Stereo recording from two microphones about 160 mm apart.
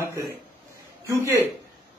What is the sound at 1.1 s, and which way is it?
Speech, 15° right (ahead or behind).